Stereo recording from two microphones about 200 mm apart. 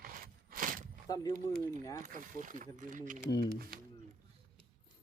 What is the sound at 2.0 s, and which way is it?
Speech, 40° right (ahead or behind).